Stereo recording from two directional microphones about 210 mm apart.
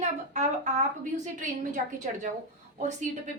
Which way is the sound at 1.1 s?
35° right (ahead or behind).